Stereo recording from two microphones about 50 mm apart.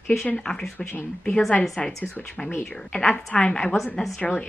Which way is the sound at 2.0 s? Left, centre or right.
Left.